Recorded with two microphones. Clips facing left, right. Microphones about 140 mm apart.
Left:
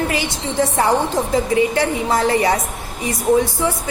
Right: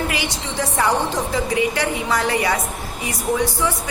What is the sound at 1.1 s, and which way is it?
Speech, 25° left (ahead or behind).